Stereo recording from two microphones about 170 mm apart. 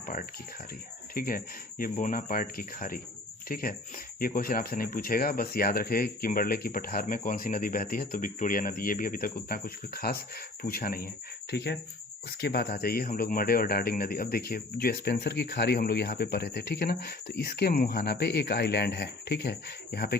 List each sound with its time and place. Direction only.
0.0 s a sound: 55° left (ahead or behind)
1.1 s speech: 55° left (ahead or behind)
11.5 s speech: 75° left (ahead or behind)